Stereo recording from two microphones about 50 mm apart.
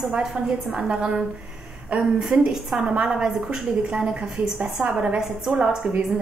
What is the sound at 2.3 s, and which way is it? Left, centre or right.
A woman's voice, centre.